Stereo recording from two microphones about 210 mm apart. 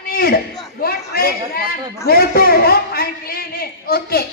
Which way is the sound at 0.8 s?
45° left (ahead or behind).